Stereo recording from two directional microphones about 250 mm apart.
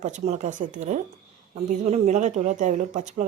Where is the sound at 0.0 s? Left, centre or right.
Right.